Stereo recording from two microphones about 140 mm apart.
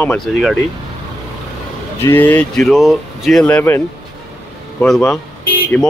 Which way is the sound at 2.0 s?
15° left (ahead or behind).